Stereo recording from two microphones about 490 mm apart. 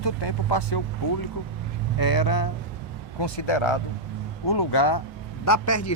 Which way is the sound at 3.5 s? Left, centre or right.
Left.